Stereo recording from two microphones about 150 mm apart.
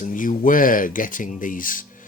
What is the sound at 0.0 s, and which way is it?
Speech, 60° left (ahead or behind).